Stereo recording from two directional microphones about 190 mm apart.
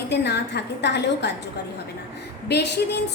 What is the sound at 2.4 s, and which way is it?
Speech, 60° left (ahead or behind).